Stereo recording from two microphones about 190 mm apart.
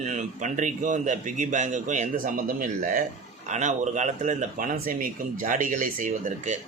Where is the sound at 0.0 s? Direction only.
40° right (ahead or behind).